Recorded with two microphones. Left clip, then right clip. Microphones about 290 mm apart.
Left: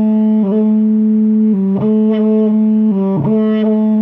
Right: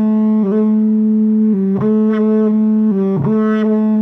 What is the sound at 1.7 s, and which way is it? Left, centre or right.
Music, right.